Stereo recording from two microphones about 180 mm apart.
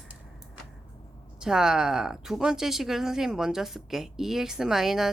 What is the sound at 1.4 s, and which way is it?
Speech, 5° right (ahead or behind).